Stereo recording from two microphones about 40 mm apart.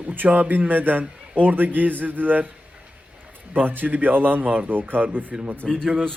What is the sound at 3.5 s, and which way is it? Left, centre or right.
Speech, right.